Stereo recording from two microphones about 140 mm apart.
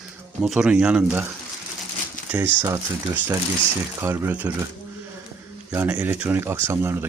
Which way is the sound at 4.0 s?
20° right (ahead or behind).